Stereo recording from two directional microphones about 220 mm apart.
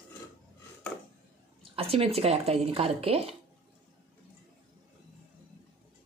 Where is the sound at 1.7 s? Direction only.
25° right (ahead or behind).